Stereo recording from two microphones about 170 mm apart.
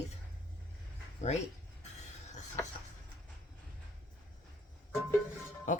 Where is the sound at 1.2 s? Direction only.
40° left (ahead or behind).